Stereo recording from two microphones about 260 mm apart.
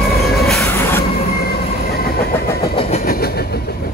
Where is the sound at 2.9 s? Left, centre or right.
Left.